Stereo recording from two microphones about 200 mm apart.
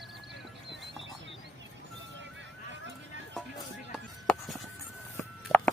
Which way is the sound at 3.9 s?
Centre (ahead or behind).